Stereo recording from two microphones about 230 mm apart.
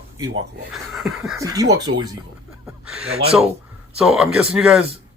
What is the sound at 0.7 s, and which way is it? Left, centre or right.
Speech, centre.